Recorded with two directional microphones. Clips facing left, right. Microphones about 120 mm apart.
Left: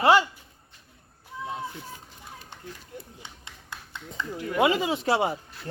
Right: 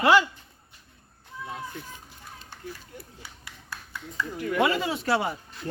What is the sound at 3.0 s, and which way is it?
Speech, 20° left (ahead or behind).